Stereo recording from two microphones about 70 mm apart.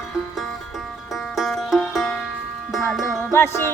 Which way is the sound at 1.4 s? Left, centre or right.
Centre.